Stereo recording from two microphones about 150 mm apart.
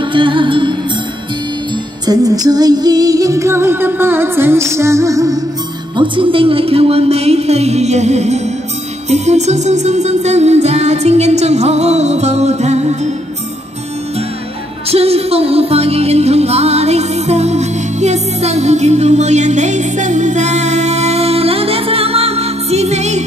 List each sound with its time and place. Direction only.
0.0 s music: 35° right (ahead or behind)
2.0 s music: 25° right (ahead or behind)
5.9 s music: 35° right (ahead or behind)
14.9 s music: 40° right (ahead or behind)